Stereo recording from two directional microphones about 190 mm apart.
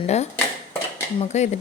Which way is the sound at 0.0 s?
35° left (ahead or behind).